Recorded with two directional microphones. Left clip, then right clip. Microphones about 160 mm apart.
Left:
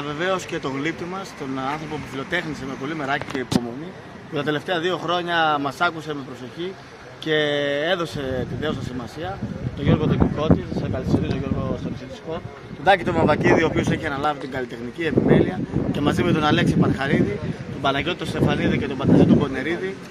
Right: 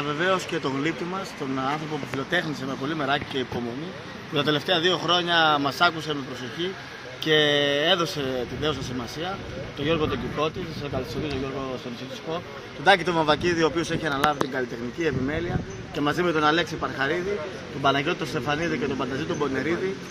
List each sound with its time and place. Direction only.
0.0 s speech: 15° left (ahead or behind)
4.3 s speech: 5° left (ahead or behind)
7.2 s speech: 5° left (ahead or behind)
9.8 s speech: 5° left (ahead or behind)
12.8 s speech: 20° left (ahead or behind)
13.6 s speech: centre (ahead or behind)
14.5 s speech: 15° left (ahead or behind)